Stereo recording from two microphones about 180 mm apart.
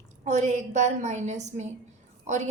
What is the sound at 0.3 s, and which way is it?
A woman's voice, 40° right (ahead or behind).